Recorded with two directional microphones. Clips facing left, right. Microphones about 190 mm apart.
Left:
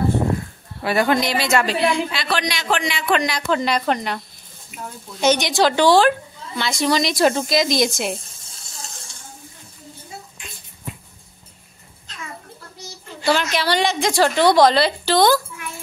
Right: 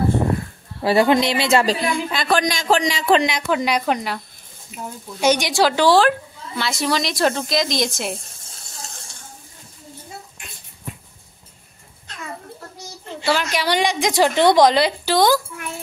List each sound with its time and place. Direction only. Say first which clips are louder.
0.8 s speech: right 3 dB; 25° right (ahead or behind)
1.9 s speech: right 1 dB; 45° right (ahead or behind)
3.2 s a woman's voice: right 1 dB; 20° right (ahead or behind); by 4.2 s 5° right (ahead or behind)
4.7 s a woman's voice: right 2 dB; 35° right (ahead or behind)
5.2 s a woman's voice: even; 10° right (ahead or behind)
13.2 s a woman's voice: left 1 dB; 5° right (ahead or behind)